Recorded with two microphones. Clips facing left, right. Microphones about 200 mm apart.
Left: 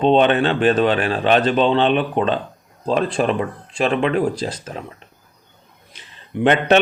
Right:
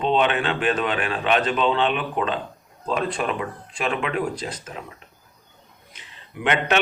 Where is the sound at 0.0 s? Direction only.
35° left (ahead or behind).